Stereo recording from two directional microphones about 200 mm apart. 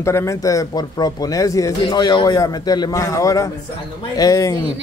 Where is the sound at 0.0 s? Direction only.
15° left (ahead or behind).